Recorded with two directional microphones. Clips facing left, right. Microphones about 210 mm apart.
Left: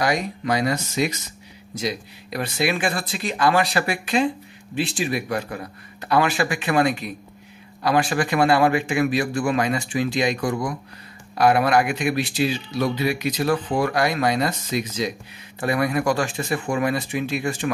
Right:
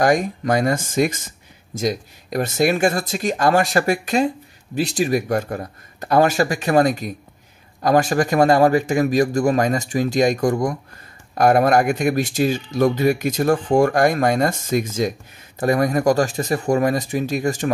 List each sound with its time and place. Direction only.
0.0 s speech: 50° right (ahead or behind)